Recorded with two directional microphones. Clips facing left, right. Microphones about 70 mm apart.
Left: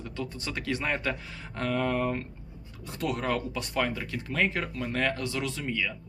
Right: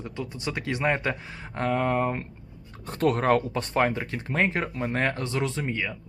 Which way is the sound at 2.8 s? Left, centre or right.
Right.